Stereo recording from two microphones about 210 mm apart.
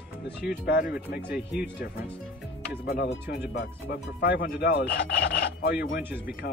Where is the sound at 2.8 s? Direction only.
50° left (ahead or behind).